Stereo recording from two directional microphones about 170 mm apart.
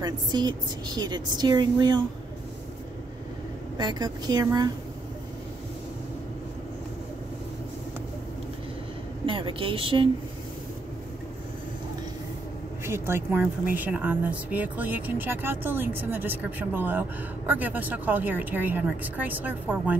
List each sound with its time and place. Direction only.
0.0 s a woman's voice: 25° right (ahead or behind)
3.7 s a woman's voice: 25° right (ahead or behind)
9.2 s a woman's voice: 30° right (ahead or behind)
12.8 s speech: 15° right (ahead or behind)